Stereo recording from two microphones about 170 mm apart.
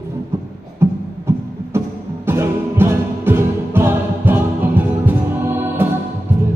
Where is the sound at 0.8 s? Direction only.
15° right (ahead or behind).